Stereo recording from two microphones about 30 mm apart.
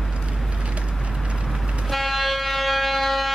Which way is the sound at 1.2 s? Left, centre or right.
Right.